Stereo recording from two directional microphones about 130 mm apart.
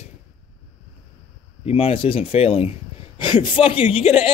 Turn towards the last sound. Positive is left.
turn(degrees=45)  # may be behind; listen again after turning